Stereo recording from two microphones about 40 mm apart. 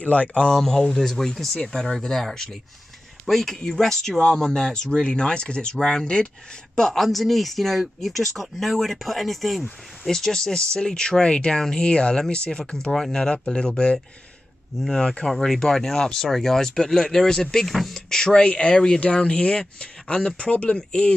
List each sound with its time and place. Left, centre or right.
0.0 s speech: left
0.3 s speech: left
0.6 s speech: centre
6.9 s speech: centre
15.2 s speech: centre
17.6 s speech: centre
18.1 s speech: centre
18.4 s speech: left